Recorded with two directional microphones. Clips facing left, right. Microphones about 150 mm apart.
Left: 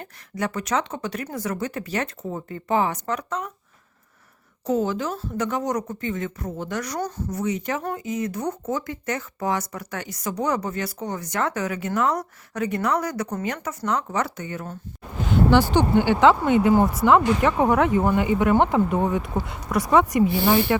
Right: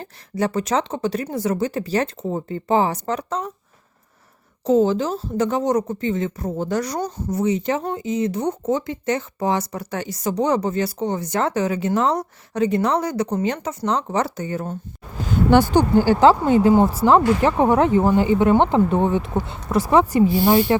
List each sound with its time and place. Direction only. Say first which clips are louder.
0.0 s speech: right 5 dB; 30° right (ahead or behind)
4.6 s speech: right 6 dB; 25° right (ahead or behind)
15.3 s speech: right 3 dB; 45° right (ahead or behind); by 20.8 s 30° right (ahead or behind)